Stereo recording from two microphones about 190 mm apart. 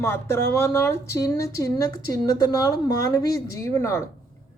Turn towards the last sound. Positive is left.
turn(degrees=15)  # may be behind; listen again after turning